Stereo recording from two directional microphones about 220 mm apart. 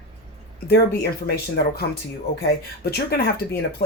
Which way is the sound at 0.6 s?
45° left (ahead or behind).